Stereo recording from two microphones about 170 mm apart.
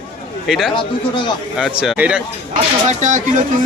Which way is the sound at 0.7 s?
30° left (ahead or behind).